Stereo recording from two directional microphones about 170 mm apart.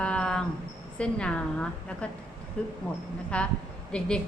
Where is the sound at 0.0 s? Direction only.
5° left (ahead or behind).